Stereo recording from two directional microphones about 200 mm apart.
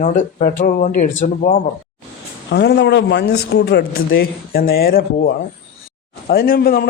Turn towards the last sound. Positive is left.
turn(degrees=50)  # may be behind; listen again after turning